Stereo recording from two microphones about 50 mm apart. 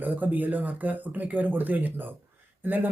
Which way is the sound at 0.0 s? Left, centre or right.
Right.